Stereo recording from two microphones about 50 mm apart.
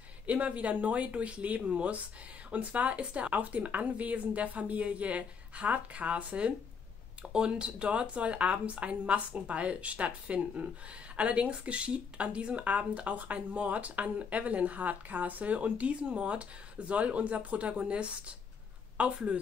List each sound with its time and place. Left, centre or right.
0.3 s speech: right